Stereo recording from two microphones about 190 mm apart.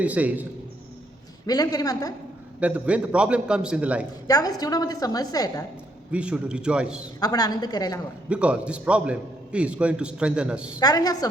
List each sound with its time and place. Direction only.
0.0 s a man's voice: 10° right (ahead or behind)
1.5 s a woman's voice: 20° left (ahead or behind)
2.6 s a man's voice: 5° right (ahead or behind)
4.3 s a woman's voice: 20° left (ahead or behind)
6.1 s a man's voice: 5° right (ahead or behind)
7.2 s a woman's voice: 20° left (ahead or behind)
8.3 s a man's voice: 5° right (ahead or behind)
10.8 s a woman's voice: 20° left (ahead or behind)